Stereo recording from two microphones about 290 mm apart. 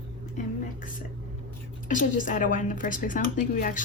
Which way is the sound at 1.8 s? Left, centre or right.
Left.